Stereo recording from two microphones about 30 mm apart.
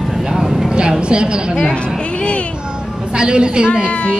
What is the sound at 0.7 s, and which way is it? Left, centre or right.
Speech, right.